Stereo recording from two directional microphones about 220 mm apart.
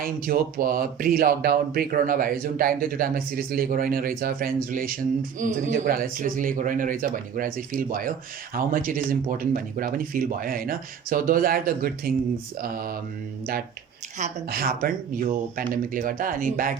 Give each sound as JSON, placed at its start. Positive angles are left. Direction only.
{"t": 0.0, "sound": "speech", "side_deg": -40}
{"t": 14.2, "sound": "speech", "side_deg": -40}